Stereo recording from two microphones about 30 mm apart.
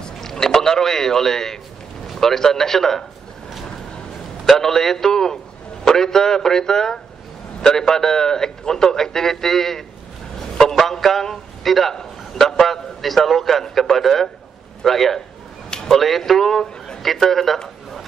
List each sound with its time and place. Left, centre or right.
0.2 s a man's voice: centre
4.5 s a man's voice: centre